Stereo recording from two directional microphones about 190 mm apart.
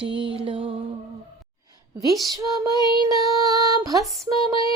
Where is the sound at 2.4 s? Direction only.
15° right (ahead or behind).